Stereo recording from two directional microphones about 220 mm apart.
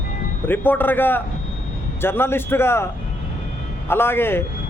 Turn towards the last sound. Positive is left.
turn(degrees=10)  # may be behind; listen again after turning